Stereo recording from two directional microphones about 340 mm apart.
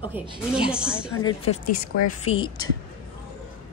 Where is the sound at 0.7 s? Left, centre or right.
Centre.